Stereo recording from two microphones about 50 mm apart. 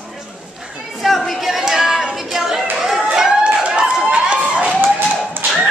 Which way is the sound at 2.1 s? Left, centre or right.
Centre.